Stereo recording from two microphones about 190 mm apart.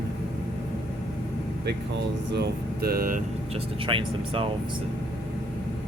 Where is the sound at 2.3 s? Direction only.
55° right (ahead or behind).